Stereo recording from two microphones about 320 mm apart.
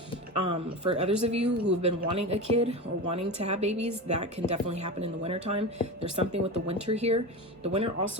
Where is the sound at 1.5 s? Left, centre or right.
Right.